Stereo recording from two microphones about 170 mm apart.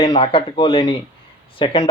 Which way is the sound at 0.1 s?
35° left (ahead or behind).